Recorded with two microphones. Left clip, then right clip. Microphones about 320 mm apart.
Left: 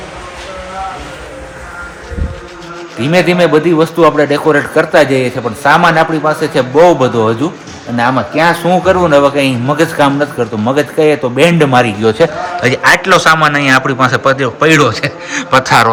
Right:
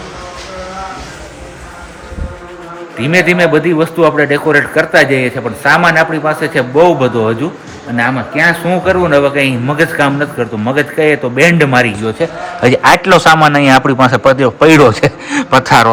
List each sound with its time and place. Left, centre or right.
3.0 s a man's voice: centre
12.0 s a man's voice: left
12.6 s a man's voice: centre